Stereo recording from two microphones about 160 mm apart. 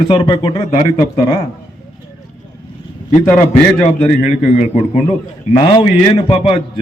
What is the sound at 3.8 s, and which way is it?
A man's voice, 45° left (ahead or behind).